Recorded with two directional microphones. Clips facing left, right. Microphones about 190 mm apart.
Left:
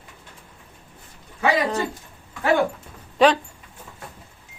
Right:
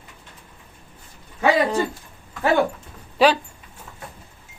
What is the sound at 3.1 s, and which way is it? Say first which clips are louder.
Speech: even; 5° right (ahead or behind).